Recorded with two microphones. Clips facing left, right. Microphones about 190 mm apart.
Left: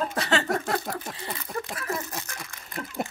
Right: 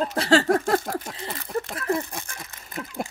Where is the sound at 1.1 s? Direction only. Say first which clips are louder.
Right 1 dB; centre (ahead or behind).